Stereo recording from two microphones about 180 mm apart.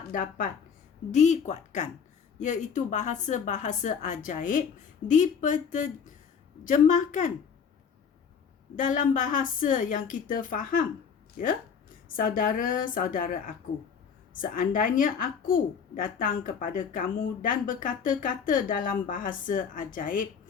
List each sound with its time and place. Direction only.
0.1 s a woman's voice: 50° left (ahead or behind)
8.7 s a woman's voice: 45° left (ahead or behind)